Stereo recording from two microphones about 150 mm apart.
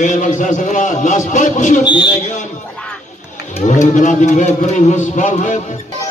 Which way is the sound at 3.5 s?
55° left (ahead or behind).